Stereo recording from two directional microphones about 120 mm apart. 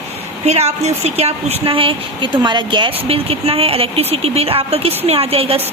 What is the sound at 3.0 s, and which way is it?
A woman's voice, 55° right (ahead or behind).